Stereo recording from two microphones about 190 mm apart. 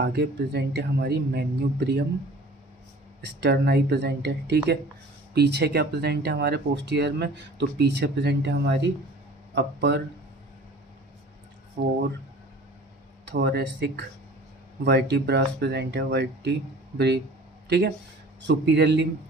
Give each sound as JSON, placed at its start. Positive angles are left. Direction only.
{"t": 0.0, "sound": "speech", "side_deg": -60}
{"t": 3.2, "sound": "speech", "side_deg": -60}
{"t": 11.8, "sound": "speech", "side_deg": -55}
{"t": 13.3, "sound": "speech", "side_deg": -65}
{"t": 17.7, "sound": "speech", "side_deg": -60}